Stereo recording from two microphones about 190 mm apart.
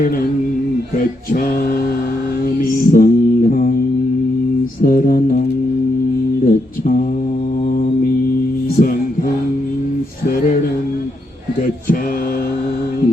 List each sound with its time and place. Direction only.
2.6 s music: 45° left (ahead or behind)
4.8 s music: 45° left (ahead or behind)
6.4 s mantra: 45° left (ahead or behind)